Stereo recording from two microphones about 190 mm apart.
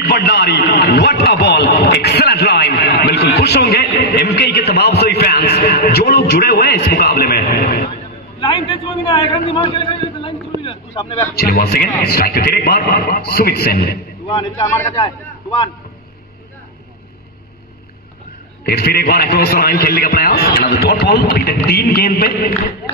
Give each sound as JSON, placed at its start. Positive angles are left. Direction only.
{"t": 0.0, "sound": "a man's voice", "side_deg": 60}
{"t": 8.4, "sound": "a man's voice", "side_deg": 25}
{"t": 10.6, "sound": "vehicle", "side_deg": 30}
{"t": 11.3, "sound": "a man's voice", "side_deg": 55}
{"t": 14.3, "sound": "a man's voice", "side_deg": 25}
{"t": 14.7, "sound": "speech", "side_deg": 15}
{"t": 18.7, "sound": "a man's voice", "side_deg": 55}